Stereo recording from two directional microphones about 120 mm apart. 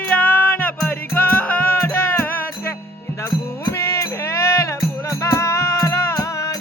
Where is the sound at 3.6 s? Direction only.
25° left (ahead or behind).